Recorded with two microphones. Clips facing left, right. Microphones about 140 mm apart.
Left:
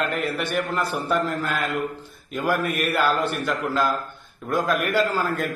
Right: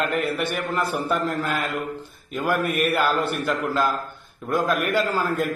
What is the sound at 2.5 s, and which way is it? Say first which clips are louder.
A man's voice: right 1 dB; centre (ahead or behind).